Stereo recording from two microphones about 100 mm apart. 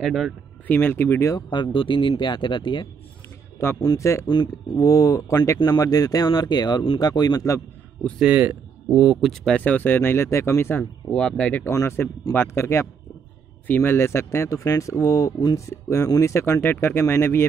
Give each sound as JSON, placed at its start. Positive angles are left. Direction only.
{"t": 0.0, "sound": "speech", "side_deg": 0}
{"t": 0.7, "sound": "speech", "side_deg": 20}
{"t": 1.3, "sound": "speech", "side_deg": 50}
{"t": 3.8, "sound": "speech", "side_deg": 35}
{"t": 4.3, "sound": "speech", "side_deg": 45}
{"t": 8.2, "sound": "speech", "side_deg": -15}
{"t": 9.2, "sound": "speech", "side_deg": 5}
{"t": 9.6, "sound": "speech", "side_deg": 15}
{"t": 11.1, "sound": "speech", "side_deg": 10}
{"t": 11.6, "sound": "speech", "side_deg": 25}